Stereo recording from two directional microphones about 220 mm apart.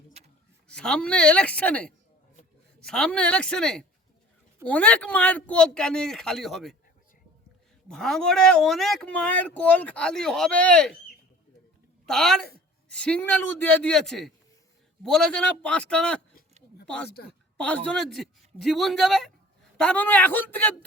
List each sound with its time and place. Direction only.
0.7 s speech: 5° left (ahead or behind)
7.9 s speech: 5° left (ahead or behind)
12.0 s speech: centre (ahead or behind)
17.1 s a woman's voice: 45° left (ahead or behind)
17.6 s a man's voice: 5° left (ahead or behind)